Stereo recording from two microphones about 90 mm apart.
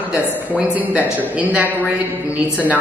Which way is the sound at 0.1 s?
15° right (ahead or behind).